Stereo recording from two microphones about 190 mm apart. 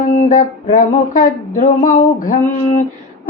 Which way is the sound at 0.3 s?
40° left (ahead or behind).